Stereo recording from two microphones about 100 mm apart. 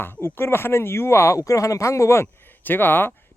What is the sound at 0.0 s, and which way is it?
Speech, 25° left (ahead or behind).